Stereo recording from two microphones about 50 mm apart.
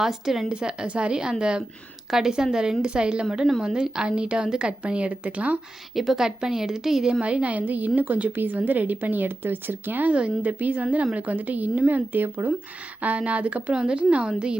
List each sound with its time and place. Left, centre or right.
0.0 s a woman's voice: centre; by 5.5 s right
5.9 s a woman's voice: centre; by 10.1 s right
10.1 s a woman's voice: right